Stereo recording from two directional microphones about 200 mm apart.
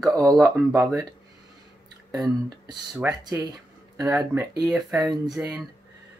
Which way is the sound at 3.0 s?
15° right (ahead or behind).